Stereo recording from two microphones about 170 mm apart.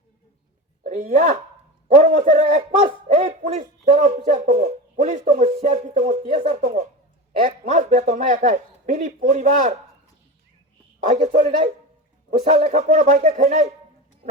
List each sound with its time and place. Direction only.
0.9 s a man's voice: 45° right (ahead or behind)
11.1 s a man's voice: 45° right (ahead or behind)